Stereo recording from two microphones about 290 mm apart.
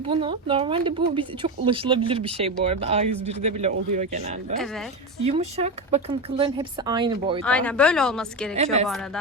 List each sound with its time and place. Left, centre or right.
0.1 s speech: centre
5.2 s speech: right
7.4 s speech: centre
8.5 s speech: right